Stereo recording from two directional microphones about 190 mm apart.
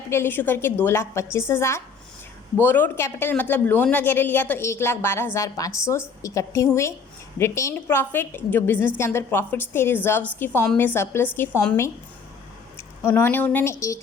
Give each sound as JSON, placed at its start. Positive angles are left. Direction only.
{"t": 0.1, "sound": "a woman's voice", "side_deg": 10}